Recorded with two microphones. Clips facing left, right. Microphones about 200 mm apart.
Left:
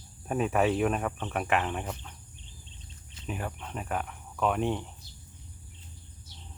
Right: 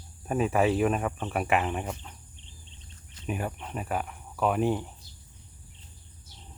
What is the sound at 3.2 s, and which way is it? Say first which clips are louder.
Speech: right 3 dB; 10° right (ahead or behind).